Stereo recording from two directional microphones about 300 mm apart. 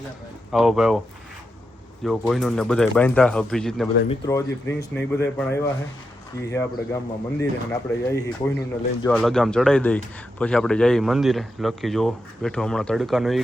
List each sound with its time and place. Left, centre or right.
0.5 s a man's voice: centre
2.0 s a man's voice: centre